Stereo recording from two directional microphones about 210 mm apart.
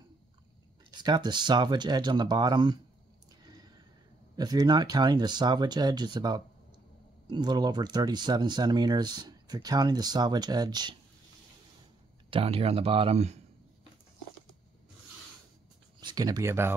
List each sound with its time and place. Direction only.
0.9 s speech: 20° right (ahead or behind)
4.4 s speech: 20° right (ahead or behind)
12.3 s speech: 25° right (ahead or behind)
16.0 s speech: 20° right (ahead or behind)